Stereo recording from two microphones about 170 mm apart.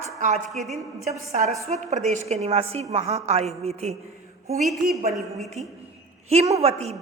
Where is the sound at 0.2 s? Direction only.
45° right (ahead or behind).